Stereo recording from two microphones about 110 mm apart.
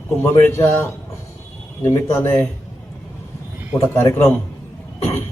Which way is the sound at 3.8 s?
20° left (ahead or behind).